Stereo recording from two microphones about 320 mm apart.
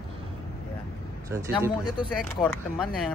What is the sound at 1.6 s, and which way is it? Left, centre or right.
Speech, centre.